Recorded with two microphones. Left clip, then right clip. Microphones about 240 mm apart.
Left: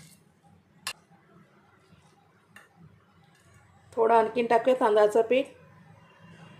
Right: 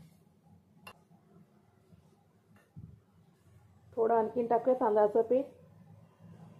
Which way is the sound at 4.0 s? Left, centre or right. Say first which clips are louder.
Left 7 dB; centre.